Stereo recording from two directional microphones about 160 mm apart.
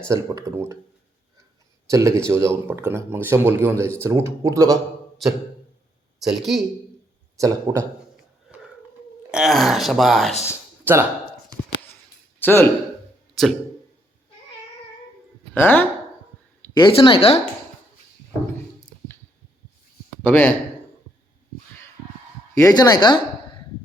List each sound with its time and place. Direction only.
0.1 s speech: 20° right (ahead or behind)
1.9 s speech: 15° right (ahead or behind)
6.3 s speech: centre (ahead or behind)
7.3 s speech: 20° right (ahead or behind)
9.3 s speech: centre (ahead or behind)
10.9 s speech: 15° right (ahead or behind)
12.4 s speech: 15° left (ahead or behind)
13.3 s speech: centre (ahead or behind)
15.5 s speech: 10° left (ahead or behind)
16.7 s speech: 30° left (ahead or behind)
20.2 s speech: 10° left (ahead or behind)
22.5 s a woman's voice: 20° left (ahead or behind)